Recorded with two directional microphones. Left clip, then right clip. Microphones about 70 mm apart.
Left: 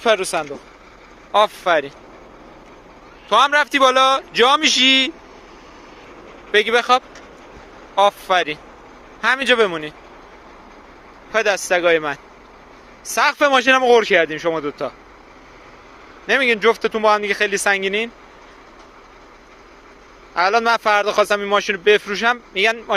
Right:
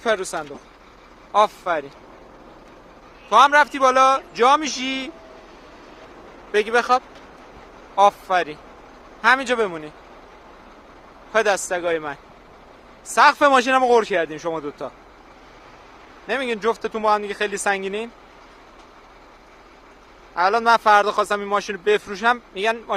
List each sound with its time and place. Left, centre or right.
0.0 s speech: centre
1.3 s speech: left
3.2 s speech: left
3.8 s a man's voice: left
6.5 s speech: left
11.3 s speech: centre
13.5 s speech: left
14.3 s speech: centre
14.6 s speech: centre
16.3 s speech: left
17.1 s speech: left
20.3 s speech: left